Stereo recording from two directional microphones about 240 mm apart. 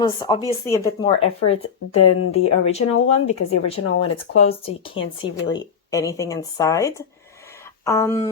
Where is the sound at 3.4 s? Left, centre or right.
Left.